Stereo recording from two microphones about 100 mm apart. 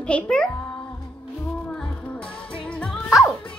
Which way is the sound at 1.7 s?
10° left (ahead or behind).